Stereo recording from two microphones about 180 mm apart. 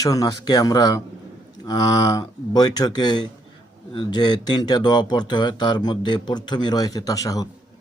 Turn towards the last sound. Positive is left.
turn(degrees=20)  # may be behind; listen again after turning